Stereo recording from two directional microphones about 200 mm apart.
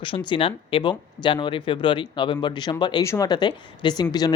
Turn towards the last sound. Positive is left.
turn(degrees=20)  # may be behind; listen again after turning